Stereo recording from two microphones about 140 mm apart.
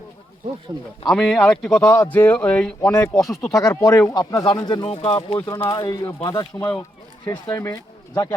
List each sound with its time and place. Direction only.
1.0 s speech: centre (ahead or behind)
3.6 s speech: 25° left (ahead or behind)
4.9 s speech: 45° left (ahead or behind); by 6.5 s 30° left (ahead or behind)
7.5 s speech: 20° left (ahead or behind)